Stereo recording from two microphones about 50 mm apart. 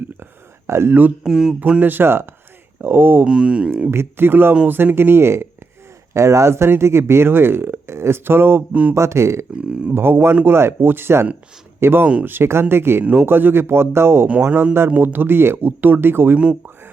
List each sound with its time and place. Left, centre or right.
0.7 s speech: right
1.2 s a sound: centre
1.8 s speech: right
3.2 s speech: right
3.9 s speech: right
6.1 s speech: right
8.7 s speech: right
9.0 s speech: right
9.6 s speech: right
9.9 s speech: right
14.4 s speech: right